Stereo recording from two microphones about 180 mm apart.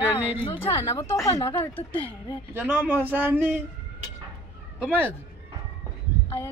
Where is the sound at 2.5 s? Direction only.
10° right (ahead or behind).